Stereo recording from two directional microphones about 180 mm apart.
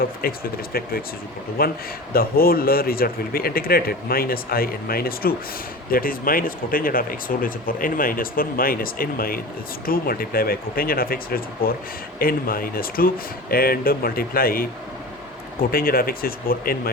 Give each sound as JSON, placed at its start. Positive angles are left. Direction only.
{"t": 0.0, "sound": "speech", "side_deg": 55}
{"t": 15.7, "sound": "speech", "side_deg": 55}